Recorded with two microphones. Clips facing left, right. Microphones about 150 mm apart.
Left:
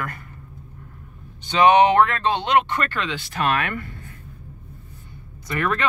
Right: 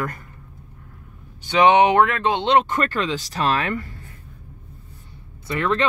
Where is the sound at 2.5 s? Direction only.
35° right (ahead or behind).